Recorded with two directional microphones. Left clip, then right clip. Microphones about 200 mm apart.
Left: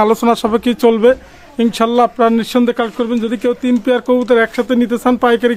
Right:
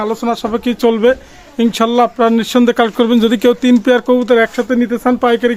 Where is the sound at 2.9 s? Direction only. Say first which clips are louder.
Right 5 dB; 45° right (ahead or behind).